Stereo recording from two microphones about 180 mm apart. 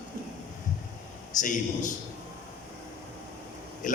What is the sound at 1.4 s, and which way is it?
Speech, 45° left (ahead or behind).